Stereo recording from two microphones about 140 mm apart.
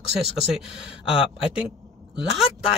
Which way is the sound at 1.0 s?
40° left (ahead or behind).